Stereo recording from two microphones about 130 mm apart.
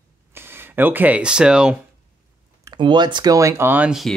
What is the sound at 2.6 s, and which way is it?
Speech, 35° right (ahead or behind).